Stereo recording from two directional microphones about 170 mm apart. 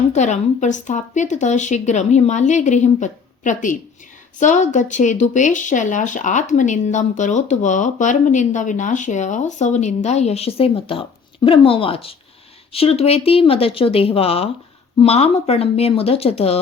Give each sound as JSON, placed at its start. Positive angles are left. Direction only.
{"t": 0.1, "sound": "speech", "side_deg": 45}